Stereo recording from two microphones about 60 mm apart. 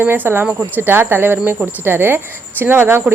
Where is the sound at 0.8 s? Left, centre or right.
Right.